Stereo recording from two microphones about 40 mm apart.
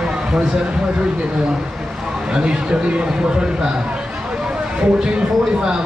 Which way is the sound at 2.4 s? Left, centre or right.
Right.